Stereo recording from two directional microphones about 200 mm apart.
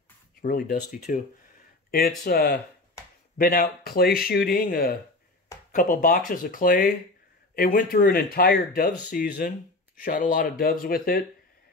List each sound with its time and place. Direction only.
0.4 s speech: 45° left (ahead or behind)